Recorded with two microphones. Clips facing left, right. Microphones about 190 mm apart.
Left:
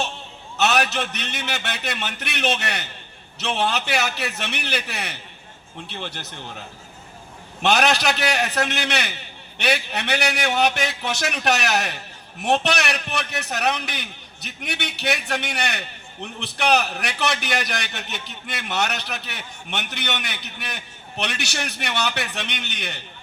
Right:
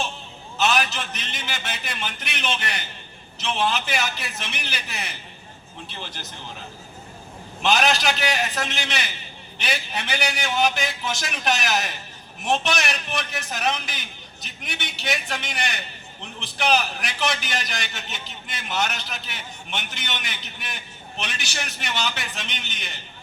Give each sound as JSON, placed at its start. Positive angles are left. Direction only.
{"t": 0.6, "sound": "a man's voice", "side_deg": 65}
{"t": 7.6, "sound": "a man's voice", "side_deg": 65}